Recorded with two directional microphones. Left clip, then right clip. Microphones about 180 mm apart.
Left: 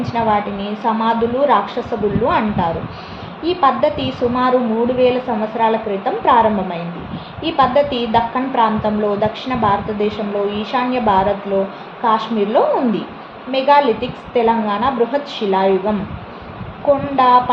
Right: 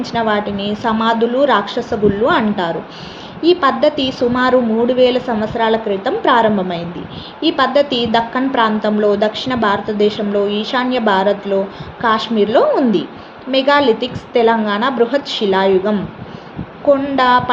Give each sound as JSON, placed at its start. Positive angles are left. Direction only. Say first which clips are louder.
{"t": 0.0, "sound": "a woman's voice", "louder": "even", "side_deg": -50}
{"t": 17.2, "sound": "a woman's voice", "louder": "left 3 dB", "side_deg": -50}